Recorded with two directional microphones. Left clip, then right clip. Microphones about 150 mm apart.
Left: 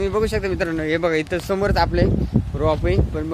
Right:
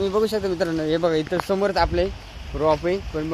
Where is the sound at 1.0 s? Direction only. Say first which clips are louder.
Left 1 dB; 35° left (ahead or behind).